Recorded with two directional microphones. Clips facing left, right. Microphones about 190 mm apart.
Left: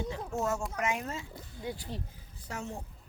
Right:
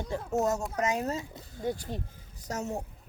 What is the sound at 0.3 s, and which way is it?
Speech, 40° right (ahead or behind).